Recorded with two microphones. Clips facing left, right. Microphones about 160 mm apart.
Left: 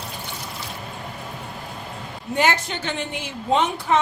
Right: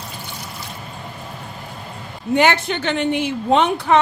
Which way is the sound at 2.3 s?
70° right (ahead or behind).